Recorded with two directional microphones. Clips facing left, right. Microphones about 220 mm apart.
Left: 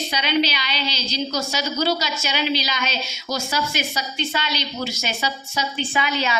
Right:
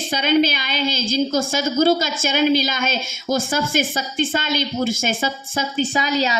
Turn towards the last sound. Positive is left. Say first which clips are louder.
# right 3 dB
turn(degrees=-40)  # may be behind; listen again after turning